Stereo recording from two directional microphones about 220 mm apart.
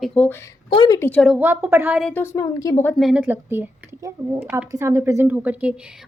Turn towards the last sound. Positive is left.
turn(degrees=-5)  # may be behind; listen again after turning